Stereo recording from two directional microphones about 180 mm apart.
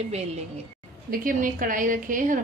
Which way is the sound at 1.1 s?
50° right (ahead or behind).